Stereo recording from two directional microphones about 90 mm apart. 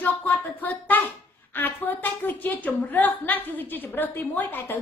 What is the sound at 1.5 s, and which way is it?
A woman's voice, 20° left (ahead or behind).